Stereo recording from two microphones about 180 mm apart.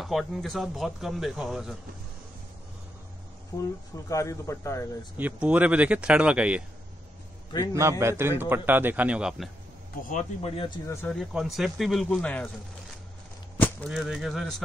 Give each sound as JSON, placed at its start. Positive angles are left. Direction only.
{"t": 0.0, "sound": "speech", "side_deg": 0}
{"t": 3.5, "sound": "a man's voice", "side_deg": 20}
{"t": 5.1, "sound": "speech", "side_deg": -10}
{"t": 8.0, "sound": "speech", "side_deg": -15}
{"t": 10.0, "sound": "speech", "side_deg": 45}
{"t": 10.5, "sound": "speech", "side_deg": 30}
{"t": 11.1, "sound": "speech", "side_deg": 0}
{"t": 13.6, "sound": "a sound", "side_deg": 10}